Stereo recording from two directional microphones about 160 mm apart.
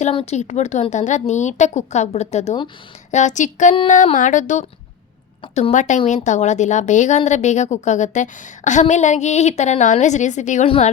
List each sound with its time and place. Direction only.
0.1 s a woman's voice: 40° left (ahead or behind)